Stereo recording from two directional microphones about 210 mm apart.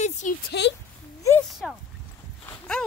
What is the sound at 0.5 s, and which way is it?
Speech, 50° left (ahead or behind).